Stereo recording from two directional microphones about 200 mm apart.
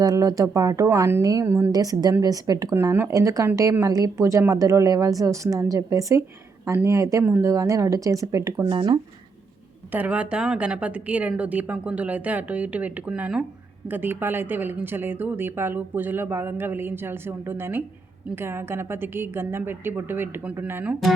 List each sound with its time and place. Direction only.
0.0 s a woman's voice: 15° right (ahead or behind)
9.9 s a woman's voice: 5° right (ahead or behind)